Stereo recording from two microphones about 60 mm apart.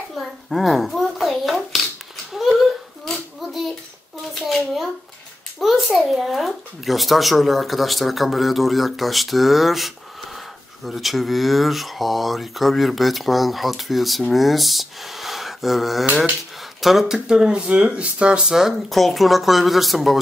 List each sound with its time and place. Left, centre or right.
0.1 s hands: centre
4.5 s a sound: centre
5.6 s speech: centre
18.4 s speech: centre